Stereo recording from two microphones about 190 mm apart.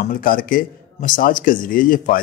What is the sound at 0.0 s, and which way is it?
A man's voice, 50° left (ahead or behind).